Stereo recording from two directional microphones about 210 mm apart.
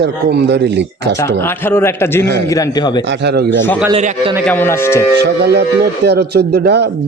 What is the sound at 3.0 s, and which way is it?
Speech, 55° right (ahead or behind).